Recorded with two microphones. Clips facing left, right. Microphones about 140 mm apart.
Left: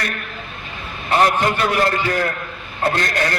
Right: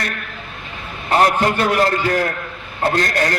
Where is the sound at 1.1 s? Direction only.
40° right (ahead or behind).